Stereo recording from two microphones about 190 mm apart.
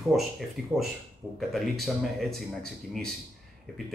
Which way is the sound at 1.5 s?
Centre (ahead or behind).